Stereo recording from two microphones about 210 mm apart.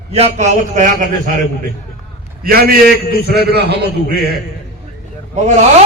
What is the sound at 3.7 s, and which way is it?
Speech, 50° right (ahead or behind).